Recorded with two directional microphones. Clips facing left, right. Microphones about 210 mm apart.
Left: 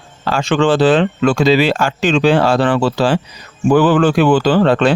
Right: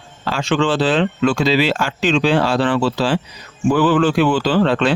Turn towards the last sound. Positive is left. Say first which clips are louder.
# left 4 dB
turn(degrees=45)  # may be behind; listen again after turning